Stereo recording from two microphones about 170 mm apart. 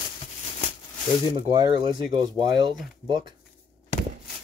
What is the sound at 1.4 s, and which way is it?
Speech, 25° right (ahead or behind).